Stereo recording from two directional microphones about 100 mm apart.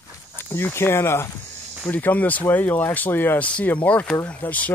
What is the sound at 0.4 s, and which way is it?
Speech, 25° left (ahead or behind).